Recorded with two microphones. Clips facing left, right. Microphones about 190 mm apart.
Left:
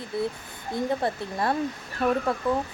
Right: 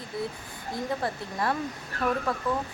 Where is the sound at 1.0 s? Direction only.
25° left (ahead or behind).